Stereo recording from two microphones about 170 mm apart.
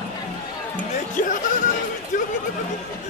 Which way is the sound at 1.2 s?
50° left (ahead or behind).